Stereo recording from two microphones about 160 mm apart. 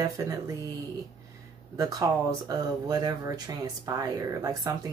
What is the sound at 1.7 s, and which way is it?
Speech, 25° right (ahead or behind).